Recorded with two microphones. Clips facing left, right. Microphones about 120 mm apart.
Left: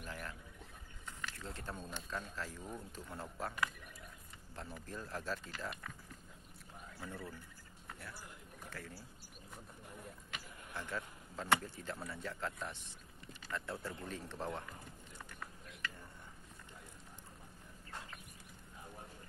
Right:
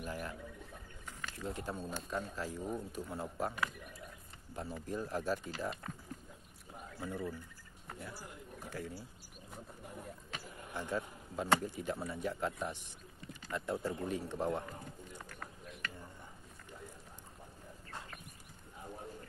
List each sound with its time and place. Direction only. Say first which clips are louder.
0.0 s speech: right 5 dB; 15° right (ahead or behind)
1.0 s a sound: right 4 dB; 15° right (ahead or behind)
2.0 s speech: right 4 dB; 15° right (ahead or behind)
4.8 s speech: right 7 dB; 15° right (ahead or behind)
7.0 s speech: right 7 dB; 15° right (ahead or behind)
8.6 s speech: right 6 dB; 15° right (ahead or behind)
10.7 s speech: right 5 dB; 15° right (ahead or behind)